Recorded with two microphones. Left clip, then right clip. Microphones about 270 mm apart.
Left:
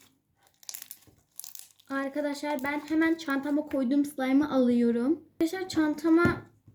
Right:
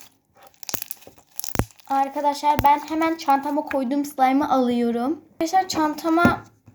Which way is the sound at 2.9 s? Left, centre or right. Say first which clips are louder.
Right 7 dB; right.